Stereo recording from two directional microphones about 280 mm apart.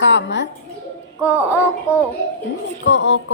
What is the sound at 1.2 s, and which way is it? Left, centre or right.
Child singing, centre.